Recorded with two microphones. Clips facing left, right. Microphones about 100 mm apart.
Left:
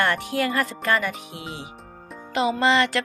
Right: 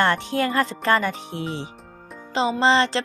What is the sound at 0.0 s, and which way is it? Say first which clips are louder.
Speech: right 2 dB; 25° right (ahead or behind).